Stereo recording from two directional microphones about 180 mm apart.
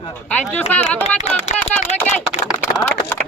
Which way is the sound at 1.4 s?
40° left (ahead or behind).